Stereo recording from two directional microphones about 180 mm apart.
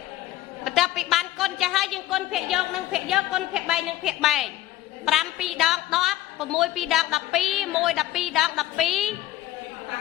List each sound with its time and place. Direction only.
0.6 s a woman's voice: centre (ahead or behind)